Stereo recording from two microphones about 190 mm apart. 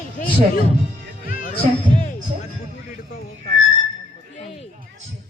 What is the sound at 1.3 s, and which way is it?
Music, 45° left (ahead or behind).